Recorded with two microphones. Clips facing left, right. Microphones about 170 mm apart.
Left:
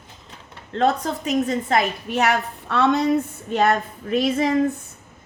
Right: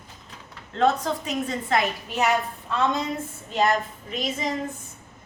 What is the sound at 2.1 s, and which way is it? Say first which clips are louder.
Speech: left 3 dB; 70° left (ahead or behind).